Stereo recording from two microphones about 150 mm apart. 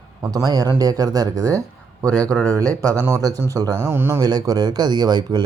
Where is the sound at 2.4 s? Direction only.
20° right (ahead or behind).